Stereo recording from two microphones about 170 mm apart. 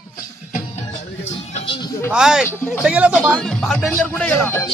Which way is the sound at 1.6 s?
30° left (ahead or behind).